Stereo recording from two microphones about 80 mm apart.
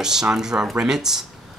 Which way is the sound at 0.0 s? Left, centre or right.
Centre.